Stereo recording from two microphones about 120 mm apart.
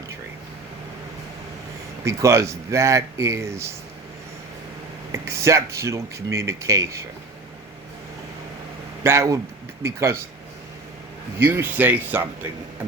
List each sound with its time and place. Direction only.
2.0 s speech: 25° right (ahead or behind)
5.1 s speech: 20° right (ahead or behind)
9.0 s speech: 25° right (ahead or behind)
11.3 s speech: 20° right (ahead or behind)